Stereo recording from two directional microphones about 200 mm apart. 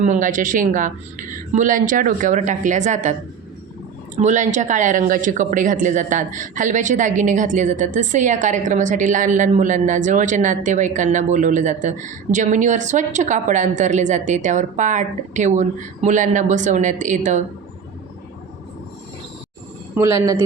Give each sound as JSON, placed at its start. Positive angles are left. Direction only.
{"t": 0.0, "sound": "speech", "side_deg": -40}
{"t": 4.2, "sound": "speech", "side_deg": -35}
{"t": 20.0, "sound": "speech", "side_deg": -15}